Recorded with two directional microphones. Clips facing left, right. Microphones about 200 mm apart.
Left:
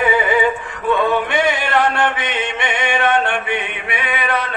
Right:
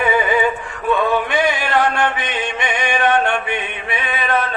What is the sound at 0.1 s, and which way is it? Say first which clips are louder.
Synthetic singing: even; 20° left (ahead or behind).